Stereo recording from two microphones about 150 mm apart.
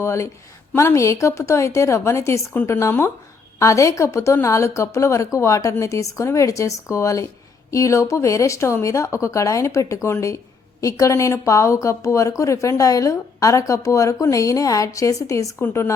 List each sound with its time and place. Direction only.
0.0 s a woman's voice: 20° left (ahead or behind)